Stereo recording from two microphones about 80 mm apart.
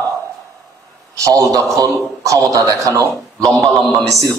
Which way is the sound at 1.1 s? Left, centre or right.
Right.